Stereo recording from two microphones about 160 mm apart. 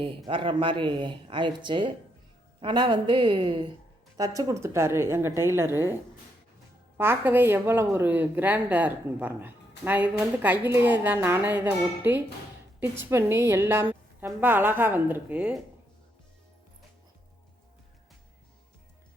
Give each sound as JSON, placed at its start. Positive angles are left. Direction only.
{"t": 0.3, "sound": "speech", "side_deg": -30}